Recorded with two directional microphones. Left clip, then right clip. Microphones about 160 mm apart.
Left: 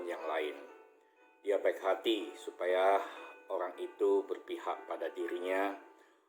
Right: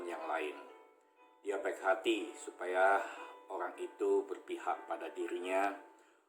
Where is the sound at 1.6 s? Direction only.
5° right (ahead or behind).